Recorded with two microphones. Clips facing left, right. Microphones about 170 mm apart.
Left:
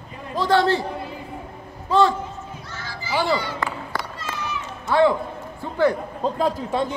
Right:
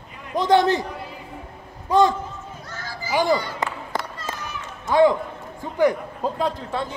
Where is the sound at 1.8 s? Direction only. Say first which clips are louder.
Right 1 dB; 15° right (ahead or behind).